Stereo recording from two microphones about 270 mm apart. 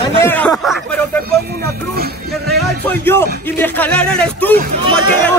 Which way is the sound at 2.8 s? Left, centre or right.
Centre.